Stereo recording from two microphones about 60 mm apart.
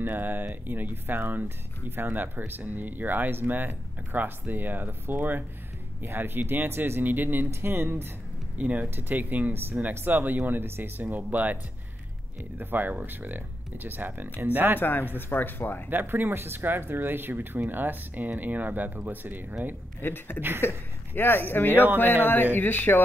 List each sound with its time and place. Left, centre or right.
0.0 s speech: right
8.5 s speech: right
12.5 s speech: right
14.8 s speech: left
15.9 s speech: right
20.0 s speech: left
21.7 s speech: right
22.2 s speech: left